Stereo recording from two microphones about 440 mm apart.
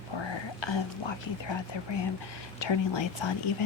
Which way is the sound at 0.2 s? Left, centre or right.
Left.